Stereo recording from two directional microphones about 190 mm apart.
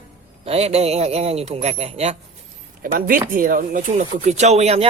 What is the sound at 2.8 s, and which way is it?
A man's voice, 45° right (ahead or behind).